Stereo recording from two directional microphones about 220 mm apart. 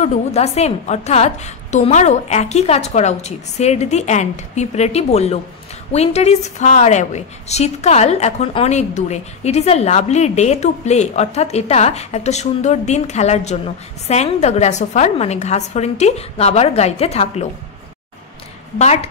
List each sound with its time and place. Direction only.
0.0 s a woman's voice: 30° left (ahead or behind)
18.8 s a woman's voice: 30° left (ahead or behind)